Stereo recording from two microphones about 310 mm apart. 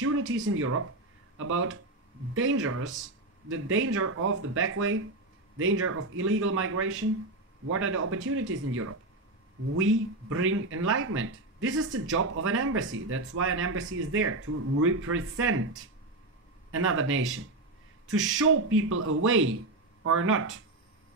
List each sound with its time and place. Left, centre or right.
0.0 s speech: right
16.7 s speech: right
18.4 s speech: right